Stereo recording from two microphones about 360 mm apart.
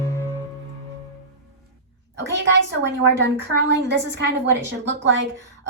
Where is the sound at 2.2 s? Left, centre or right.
Right.